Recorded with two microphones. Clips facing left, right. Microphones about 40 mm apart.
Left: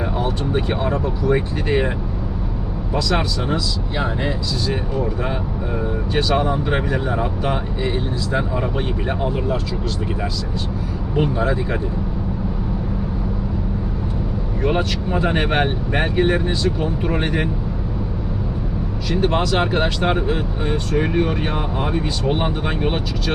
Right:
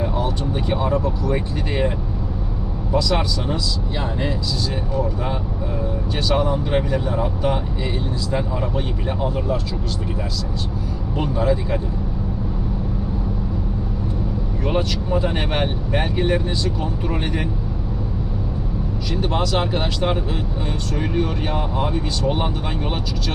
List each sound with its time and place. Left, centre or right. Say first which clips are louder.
0.2 s speech: left 2 dB; centre
3.1 s speech: left 1 dB; centre
6.1 s speech: left 2 dB; centre
11.3 s speech: even; left
14.7 s speech: even; centre
19.1 s speech: left 3 dB; left